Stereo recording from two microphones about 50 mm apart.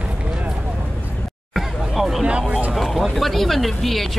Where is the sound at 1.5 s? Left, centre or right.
Centre.